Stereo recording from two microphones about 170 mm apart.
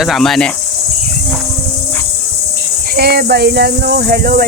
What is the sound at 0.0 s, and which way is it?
Speech, centre (ahead or behind).